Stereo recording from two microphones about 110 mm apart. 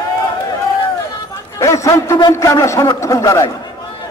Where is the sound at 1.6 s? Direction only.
30° left (ahead or behind).